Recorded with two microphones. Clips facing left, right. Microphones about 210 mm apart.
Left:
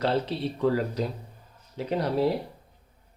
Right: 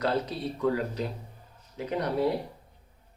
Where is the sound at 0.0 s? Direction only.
30° left (ahead or behind).